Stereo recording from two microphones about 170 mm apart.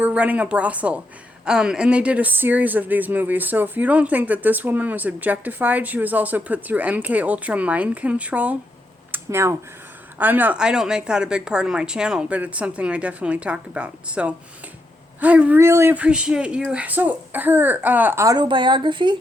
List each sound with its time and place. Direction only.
0.0 s speech: 10° right (ahead or behind); by 19.1 s 30° right (ahead or behind)